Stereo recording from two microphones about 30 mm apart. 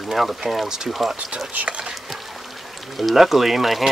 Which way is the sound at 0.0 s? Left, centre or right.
Centre.